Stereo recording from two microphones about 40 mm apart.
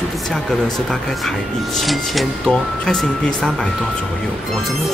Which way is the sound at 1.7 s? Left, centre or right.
Centre.